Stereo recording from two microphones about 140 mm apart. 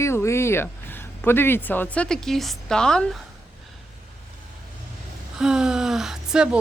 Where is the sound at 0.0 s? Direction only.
20° left (ahead or behind).